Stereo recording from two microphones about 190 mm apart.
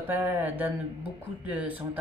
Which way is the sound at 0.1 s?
10° right (ahead or behind).